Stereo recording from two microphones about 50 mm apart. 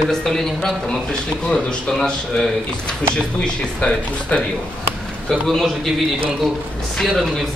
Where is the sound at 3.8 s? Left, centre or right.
Left.